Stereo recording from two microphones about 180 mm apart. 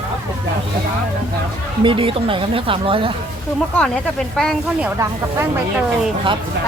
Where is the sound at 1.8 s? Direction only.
30° right (ahead or behind).